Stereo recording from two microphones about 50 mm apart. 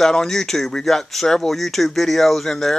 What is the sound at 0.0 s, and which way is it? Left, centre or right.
Speech, centre.